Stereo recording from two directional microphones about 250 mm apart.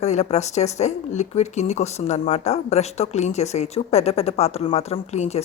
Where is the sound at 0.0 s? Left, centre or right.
Left.